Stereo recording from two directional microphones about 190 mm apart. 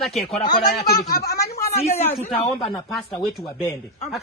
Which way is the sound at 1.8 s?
35° left (ahead or behind).